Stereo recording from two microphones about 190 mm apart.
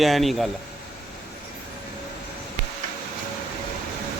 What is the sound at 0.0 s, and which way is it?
Speech, centre (ahead or behind).